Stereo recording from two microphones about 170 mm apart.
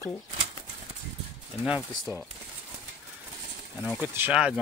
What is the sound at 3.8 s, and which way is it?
Speech, 10° right (ahead or behind).